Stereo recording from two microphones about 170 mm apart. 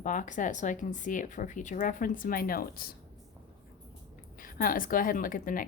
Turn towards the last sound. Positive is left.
turn(degrees=55)  # may be behind; listen again after turning